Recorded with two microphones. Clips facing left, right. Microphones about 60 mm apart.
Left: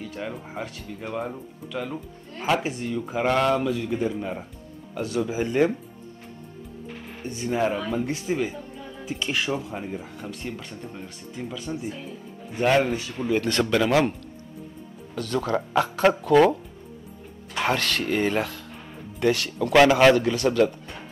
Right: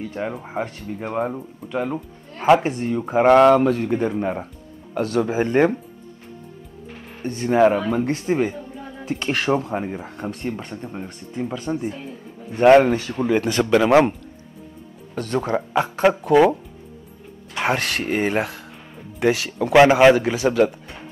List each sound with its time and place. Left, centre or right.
0.0 s speech: right
4.9 s speech: right
7.2 s speech: right
13.2 s speech: right
15.1 s speech: right
17.6 s speech: right